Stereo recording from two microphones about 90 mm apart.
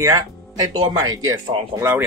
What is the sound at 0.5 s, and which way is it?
Speech, 45° right (ahead or behind).